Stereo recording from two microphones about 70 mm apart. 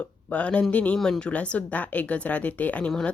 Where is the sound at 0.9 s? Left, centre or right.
Centre.